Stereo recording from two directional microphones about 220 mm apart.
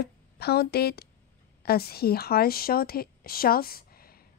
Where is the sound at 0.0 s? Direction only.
45° left (ahead or behind).